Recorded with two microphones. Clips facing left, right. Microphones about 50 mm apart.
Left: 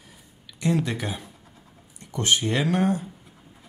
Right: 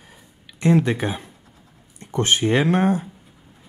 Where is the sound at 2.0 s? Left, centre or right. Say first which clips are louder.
Right 4 dB; right.